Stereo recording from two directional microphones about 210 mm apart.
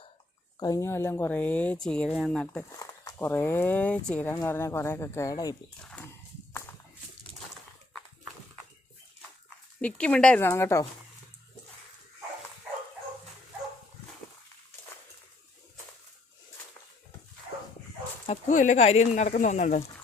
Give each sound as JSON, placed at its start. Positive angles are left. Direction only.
{"t": 0.6, "sound": "speech", "side_deg": 15}
{"t": 5.8, "sound": "walk", "side_deg": 5}
{"t": 9.8, "sound": "speech", "side_deg": 5}
{"t": 18.3, "sound": "speech", "side_deg": 35}